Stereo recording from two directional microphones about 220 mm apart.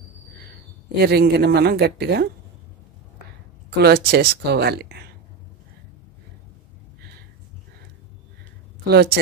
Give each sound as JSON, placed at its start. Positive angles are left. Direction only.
{"t": 0.9, "sound": "a woman's voice", "side_deg": -45}
{"t": 3.7, "sound": "a woman's voice", "side_deg": -45}
{"t": 8.8, "sound": "a woman's voice", "side_deg": -45}